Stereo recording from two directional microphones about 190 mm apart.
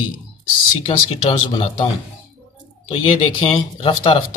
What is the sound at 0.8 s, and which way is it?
Speech, 30° left (ahead or behind).